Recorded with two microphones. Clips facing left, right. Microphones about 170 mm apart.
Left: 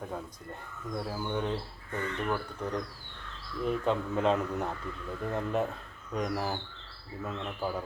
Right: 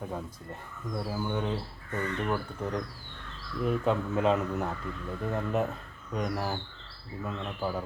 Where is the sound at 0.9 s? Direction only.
5° right (ahead or behind).